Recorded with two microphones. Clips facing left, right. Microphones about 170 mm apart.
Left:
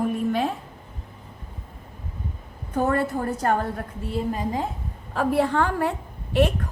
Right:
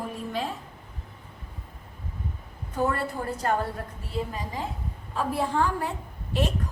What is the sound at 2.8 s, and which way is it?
Speech, 50° left (ahead or behind).